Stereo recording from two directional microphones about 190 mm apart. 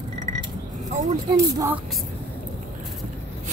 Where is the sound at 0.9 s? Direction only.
40° right (ahead or behind).